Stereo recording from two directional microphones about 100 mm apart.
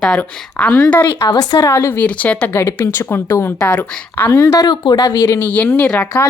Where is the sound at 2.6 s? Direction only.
30° left (ahead or behind).